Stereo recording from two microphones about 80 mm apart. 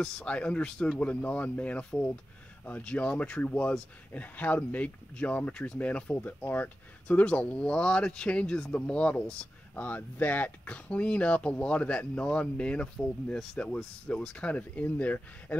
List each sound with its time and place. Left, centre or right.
0.0 s speech: centre